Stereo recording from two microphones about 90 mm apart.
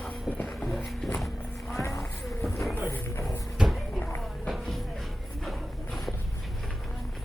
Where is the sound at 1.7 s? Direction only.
30° left (ahead or behind).